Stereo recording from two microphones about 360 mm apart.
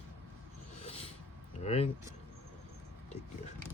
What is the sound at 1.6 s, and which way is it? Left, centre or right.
Speech, centre.